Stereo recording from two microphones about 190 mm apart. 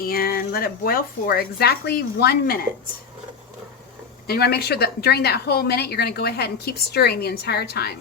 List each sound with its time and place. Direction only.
0.0 s speech: 50° left (ahead or behind)
4.3 s a woman's voice: 55° left (ahead or behind)